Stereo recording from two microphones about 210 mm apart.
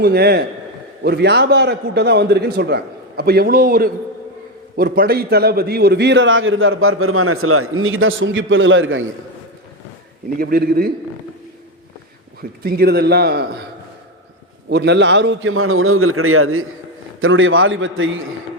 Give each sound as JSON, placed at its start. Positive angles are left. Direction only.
{"t": 0.0, "sound": "a man's voice", "side_deg": -50}
{"t": 10.3, "sound": "a man's voice", "side_deg": -45}
{"t": 12.4, "sound": "a man's voice", "side_deg": -45}
{"t": 14.7, "sound": "a man's voice", "side_deg": -55}
{"t": 17.2, "sound": "a man's voice", "side_deg": -70}